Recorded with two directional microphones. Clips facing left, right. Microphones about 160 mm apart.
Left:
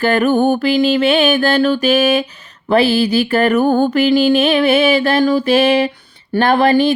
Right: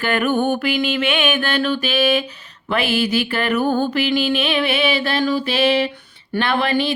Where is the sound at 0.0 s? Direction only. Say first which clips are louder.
Left 6 dB; 40° left (ahead or behind).